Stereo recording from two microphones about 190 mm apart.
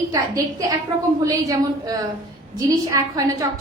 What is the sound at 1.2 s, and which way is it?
A woman's voice, 15° right (ahead or behind).